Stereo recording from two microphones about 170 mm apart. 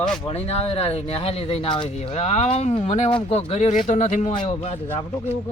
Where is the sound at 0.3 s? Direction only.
35° left (ahead or behind).